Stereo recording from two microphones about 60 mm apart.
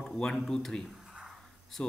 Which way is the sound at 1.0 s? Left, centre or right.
Centre.